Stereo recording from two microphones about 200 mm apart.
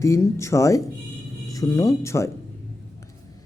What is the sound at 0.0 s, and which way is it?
A man's voice, 15° left (ahead or behind).